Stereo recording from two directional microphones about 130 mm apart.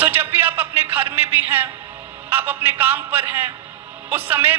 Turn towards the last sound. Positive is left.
turn(degrees=-15)  # may be behind; listen again after turning